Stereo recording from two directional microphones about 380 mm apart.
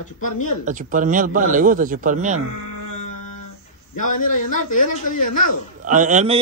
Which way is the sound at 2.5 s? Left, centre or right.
Left.